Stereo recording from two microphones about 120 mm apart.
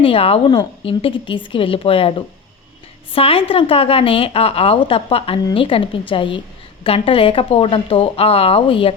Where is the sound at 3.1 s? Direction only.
50° left (ahead or behind).